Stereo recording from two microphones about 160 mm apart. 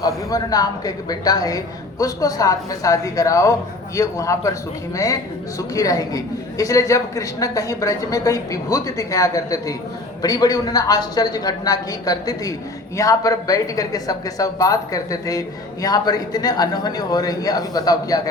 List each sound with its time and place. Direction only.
0.0 s speech: 25° left (ahead or behind)
5.5 s speech: 20° left (ahead or behind)